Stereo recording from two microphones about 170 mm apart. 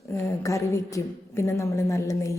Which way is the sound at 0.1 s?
20° left (ahead or behind).